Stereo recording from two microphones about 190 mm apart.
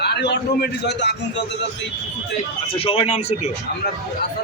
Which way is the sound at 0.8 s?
65° left (ahead or behind).